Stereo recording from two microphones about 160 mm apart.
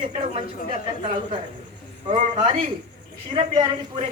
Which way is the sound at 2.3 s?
35° right (ahead or behind).